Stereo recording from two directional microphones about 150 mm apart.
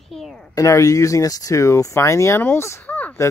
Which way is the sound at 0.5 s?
20° left (ahead or behind).